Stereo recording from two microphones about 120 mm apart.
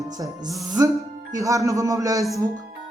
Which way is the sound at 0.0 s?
30° right (ahead or behind).